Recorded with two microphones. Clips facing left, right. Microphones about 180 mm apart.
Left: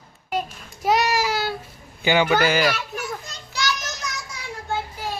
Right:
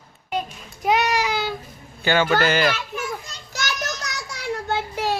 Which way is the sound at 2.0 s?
15° left (ahead or behind).